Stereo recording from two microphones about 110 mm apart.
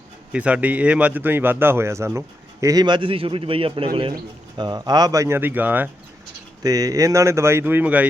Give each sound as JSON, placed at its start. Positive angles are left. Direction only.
{"t": 0.3, "sound": "a man's voice", "side_deg": -10}
{"t": 4.5, "sound": "speech", "side_deg": -40}
{"t": 5.4, "sound": "speech", "side_deg": -15}
{"t": 6.6, "sound": "a man's voice", "side_deg": -30}